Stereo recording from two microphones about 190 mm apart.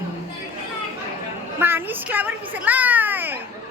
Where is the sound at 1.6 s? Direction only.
10° right (ahead or behind).